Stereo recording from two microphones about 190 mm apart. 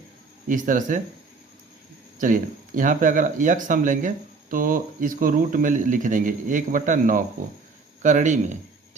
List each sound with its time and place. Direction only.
0.4 s speech: 45° right (ahead or behind)
2.1 s speech: 45° right (ahead or behind)